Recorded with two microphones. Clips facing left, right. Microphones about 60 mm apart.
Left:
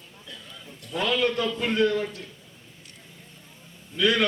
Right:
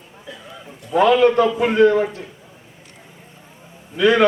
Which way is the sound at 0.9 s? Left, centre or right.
Right.